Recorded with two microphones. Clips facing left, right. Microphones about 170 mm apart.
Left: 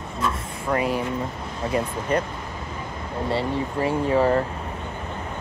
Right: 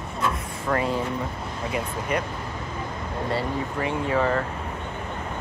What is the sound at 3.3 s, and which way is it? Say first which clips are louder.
Speech: left 3 dB; 30° left (ahead or behind).